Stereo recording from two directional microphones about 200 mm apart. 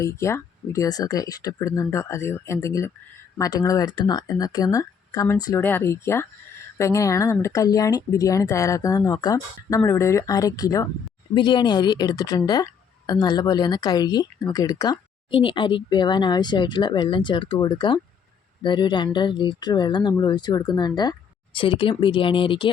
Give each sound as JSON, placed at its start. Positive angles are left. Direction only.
{"t": 0.0, "sound": "speech", "side_deg": 15}